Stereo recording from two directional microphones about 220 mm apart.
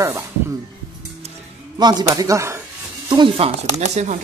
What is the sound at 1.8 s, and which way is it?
Speech, 20° right (ahead or behind).